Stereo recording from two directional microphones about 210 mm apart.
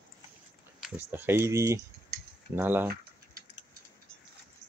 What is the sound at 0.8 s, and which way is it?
Speech, 10° right (ahead or behind).